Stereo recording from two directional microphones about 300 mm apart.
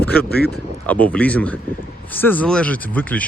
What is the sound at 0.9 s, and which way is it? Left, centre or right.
Speech, centre.